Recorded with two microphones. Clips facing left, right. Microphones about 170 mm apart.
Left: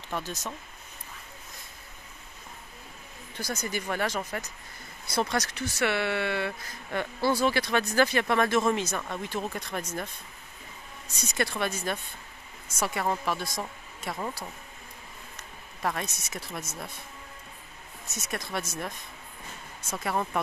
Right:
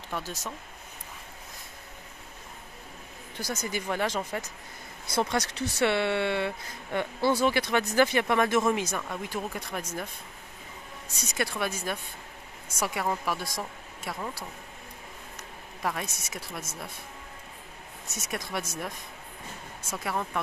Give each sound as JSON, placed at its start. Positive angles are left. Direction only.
{"t": 0.2, "sound": "speech", "side_deg": -10}
{"t": 3.3, "sound": "speech", "side_deg": -15}
{"t": 11.1, "sound": "speech", "side_deg": -10}
{"t": 15.8, "sound": "speech", "side_deg": -5}
{"t": 18.3, "sound": "speech", "side_deg": -10}
{"t": 19.9, "sound": "speech", "side_deg": -5}